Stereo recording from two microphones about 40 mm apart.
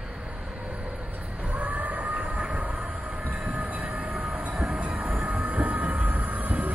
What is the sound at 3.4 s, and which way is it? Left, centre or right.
Train, right.